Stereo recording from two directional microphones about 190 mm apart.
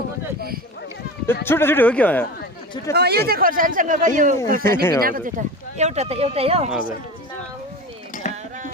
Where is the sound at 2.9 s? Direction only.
60° right (ahead or behind).